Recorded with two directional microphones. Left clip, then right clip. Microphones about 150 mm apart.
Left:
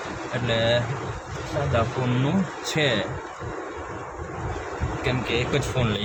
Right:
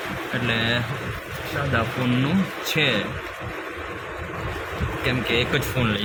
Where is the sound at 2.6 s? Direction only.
30° left (ahead or behind).